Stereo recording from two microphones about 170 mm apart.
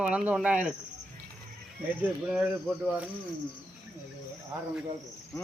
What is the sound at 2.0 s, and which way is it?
Speech, 5° right (ahead or behind).